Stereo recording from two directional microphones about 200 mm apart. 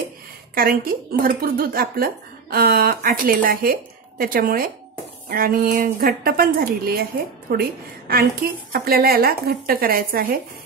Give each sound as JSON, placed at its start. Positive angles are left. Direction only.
{"t": 0.6, "sound": "a woman's voice", "side_deg": -45}
{"t": 8.1, "sound": "a woman's voice", "side_deg": -50}